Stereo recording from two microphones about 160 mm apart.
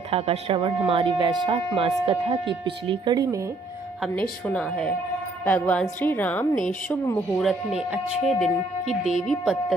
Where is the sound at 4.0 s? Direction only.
Centre (ahead or behind).